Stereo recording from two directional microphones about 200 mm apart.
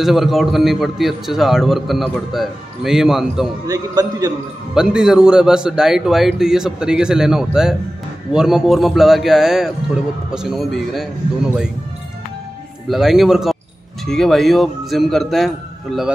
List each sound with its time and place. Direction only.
0.0 s a man's voice: centre (ahead or behind)
3.6 s a man's voice: 20° right (ahead or behind)
4.7 s a man's voice: 5° right (ahead or behind)
12.9 s a man's voice: centre (ahead or behind)